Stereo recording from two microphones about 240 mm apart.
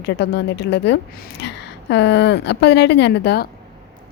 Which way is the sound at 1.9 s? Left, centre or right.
Left.